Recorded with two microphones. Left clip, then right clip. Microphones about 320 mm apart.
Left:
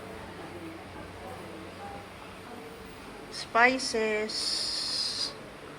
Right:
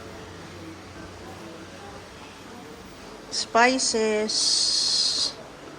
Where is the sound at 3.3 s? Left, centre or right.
Centre.